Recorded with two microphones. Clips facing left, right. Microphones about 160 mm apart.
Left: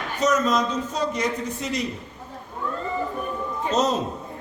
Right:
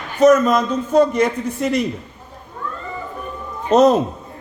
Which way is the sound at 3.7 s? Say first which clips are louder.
Right 10 dB; 60° right (ahead or behind).